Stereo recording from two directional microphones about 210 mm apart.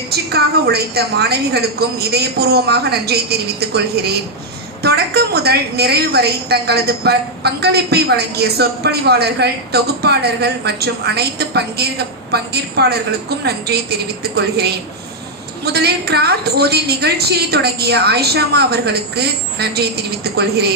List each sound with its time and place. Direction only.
0.1 s a woman's voice: 50° right (ahead or behind)
15.6 s a woman's voice: 50° right (ahead or behind)